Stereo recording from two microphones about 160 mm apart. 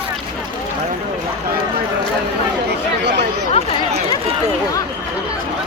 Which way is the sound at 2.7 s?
90° right.